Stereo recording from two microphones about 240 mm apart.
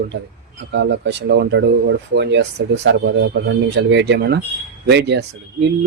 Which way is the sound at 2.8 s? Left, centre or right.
Right.